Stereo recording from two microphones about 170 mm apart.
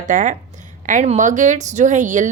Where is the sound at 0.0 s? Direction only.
50° right (ahead or behind).